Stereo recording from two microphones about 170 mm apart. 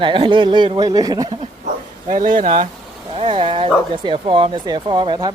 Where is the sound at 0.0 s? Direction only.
30° right (ahead or behind).